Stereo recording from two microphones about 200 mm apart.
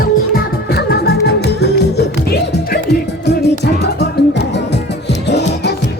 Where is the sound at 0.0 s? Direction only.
50° left (ahead or behind).